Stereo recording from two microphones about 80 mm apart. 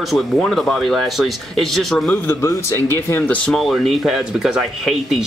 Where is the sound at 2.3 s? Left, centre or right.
Left.